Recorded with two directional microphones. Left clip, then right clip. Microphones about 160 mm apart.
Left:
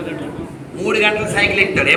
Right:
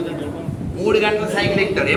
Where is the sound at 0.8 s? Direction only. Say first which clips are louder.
Left 1 dB; 20° left (ahead or behind).